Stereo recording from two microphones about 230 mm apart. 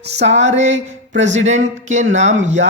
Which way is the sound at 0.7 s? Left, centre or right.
Right.